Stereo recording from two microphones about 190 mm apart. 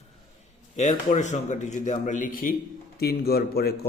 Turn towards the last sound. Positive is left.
turn(degrees=55)  # may be behind; listen again after turning